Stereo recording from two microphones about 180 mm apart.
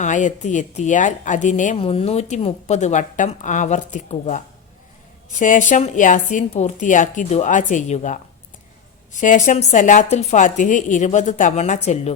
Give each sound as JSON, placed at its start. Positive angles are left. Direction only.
{"t": 0.0, "sound": "a woman's voice", "side_deg": 45}